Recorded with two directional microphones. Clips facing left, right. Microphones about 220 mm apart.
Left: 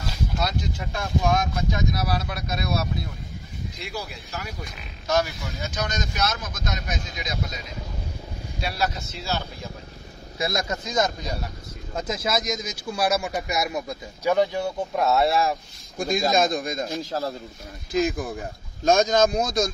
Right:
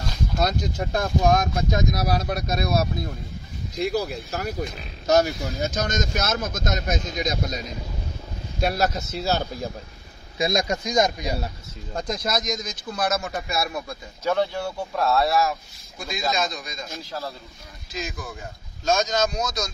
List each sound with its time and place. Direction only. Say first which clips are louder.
0.4 s speech: right 7 dB; 45° right (ahead or behind)
10.3 s speech: right 4 dB; 15° right (ahead or behind)
11.9 s speech: even; 5° left (ahead or behind); by 15.5 s 25° left (ahead or behind)
16.0 s speech: left 5 dB; 50° left (ahead or behind)